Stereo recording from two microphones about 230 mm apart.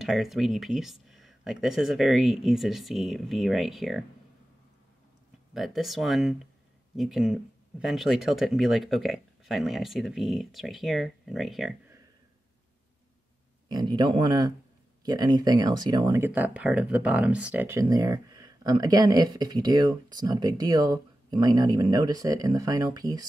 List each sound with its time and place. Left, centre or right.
0.0 s speech: centre
5.5 s speech: centre
13.7 s speech: centre